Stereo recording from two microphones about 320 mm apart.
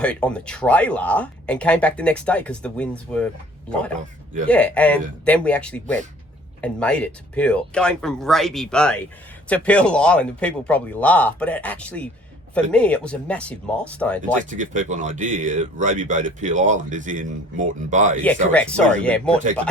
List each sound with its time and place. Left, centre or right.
0.0 s speech: centre
4.4 s speech: centre
14.2 s speech: right
18.5 s speech: centre